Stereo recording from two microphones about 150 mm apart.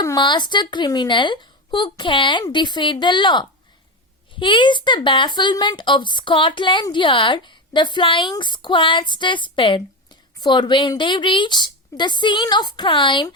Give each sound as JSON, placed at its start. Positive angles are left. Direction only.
{"t": 0.0, "sound": "speech", "side_deg": 25}